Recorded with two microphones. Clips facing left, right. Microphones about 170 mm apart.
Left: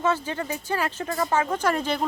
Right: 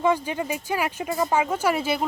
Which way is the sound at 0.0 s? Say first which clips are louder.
Right 3 dB; 15° right (ahead or behind).